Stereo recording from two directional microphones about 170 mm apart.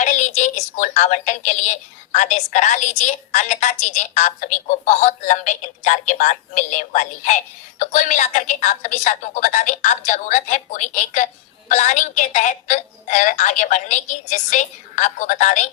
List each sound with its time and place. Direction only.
0.0 s a woman's voice: 45° left (ahead or behind)